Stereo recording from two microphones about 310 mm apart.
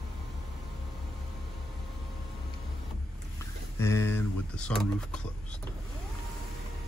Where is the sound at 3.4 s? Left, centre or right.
Centre.